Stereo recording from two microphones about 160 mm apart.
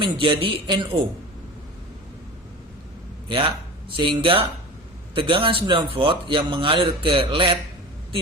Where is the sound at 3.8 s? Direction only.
30° right (ahead or behind).